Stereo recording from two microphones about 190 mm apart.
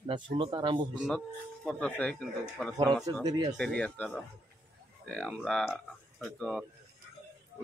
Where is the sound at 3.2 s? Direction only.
20° right (ahead or behind).